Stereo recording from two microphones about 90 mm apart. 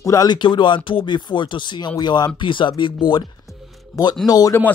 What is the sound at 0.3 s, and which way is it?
Speech, 60° left (ahead or behind).